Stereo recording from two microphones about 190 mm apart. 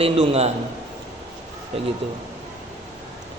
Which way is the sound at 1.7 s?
30° right (ahead or behind).